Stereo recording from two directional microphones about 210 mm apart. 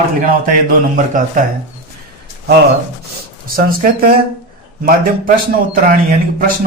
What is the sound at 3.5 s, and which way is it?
Speech, 45° right (ahead or behind).